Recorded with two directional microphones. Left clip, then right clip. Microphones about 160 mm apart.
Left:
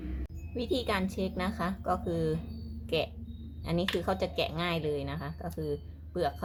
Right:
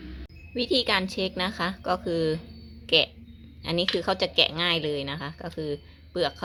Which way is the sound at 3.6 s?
40° right (ahead or behind).